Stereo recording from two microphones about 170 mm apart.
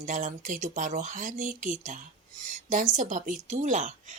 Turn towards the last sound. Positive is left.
turn(degrees=-45)  # may be behind; listen again after turning